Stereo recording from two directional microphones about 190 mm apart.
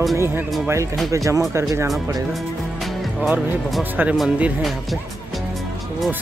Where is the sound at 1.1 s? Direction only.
15° right (ahead or behind).